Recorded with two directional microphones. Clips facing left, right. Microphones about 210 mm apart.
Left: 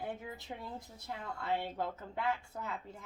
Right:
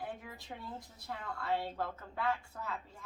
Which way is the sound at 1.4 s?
20° left (ahead or behind).